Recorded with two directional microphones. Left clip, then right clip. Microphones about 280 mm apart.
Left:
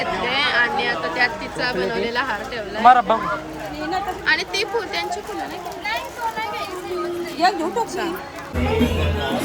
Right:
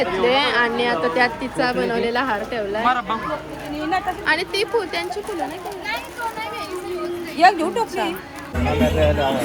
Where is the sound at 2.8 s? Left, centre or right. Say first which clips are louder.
Left 9 dB; left.